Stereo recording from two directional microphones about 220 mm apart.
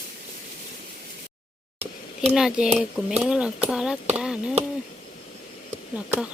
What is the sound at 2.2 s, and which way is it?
Speech, centre (ahead or behind).